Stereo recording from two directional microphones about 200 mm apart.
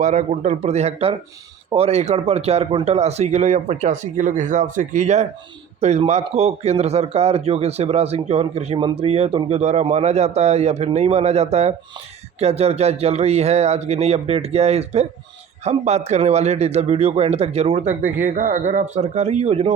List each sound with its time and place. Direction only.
0.0 s speech: 35° right (ahead or behind)